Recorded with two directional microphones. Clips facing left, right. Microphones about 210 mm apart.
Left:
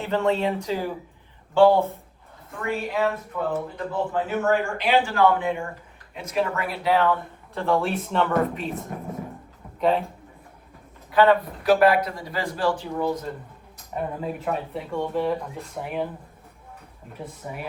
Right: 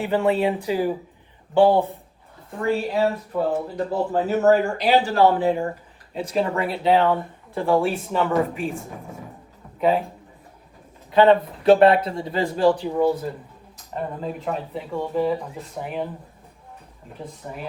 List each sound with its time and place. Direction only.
0.0 s speech: 15° right (ahead or behind)
2.5 s speech: 30° right (ahead or behind)
7.5 s speech: 10° right (ahead or behind)
11.1 s speech: 25° right (ahead or behind)
13.9 s speech: 5° left (ahead or behind)
17.2 s speech: 5° left (ahead or behind)